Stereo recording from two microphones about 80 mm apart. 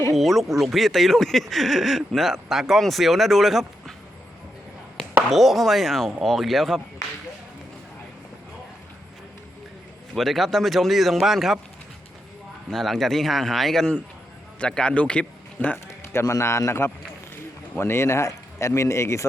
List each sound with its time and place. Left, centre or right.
0.1 s speech: centre
5.3 s speech: centre
10.2 s speech: centre
12.7 s speech: centre
15.9 s a man's voice: left